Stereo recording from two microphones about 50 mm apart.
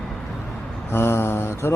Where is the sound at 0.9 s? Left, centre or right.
Left.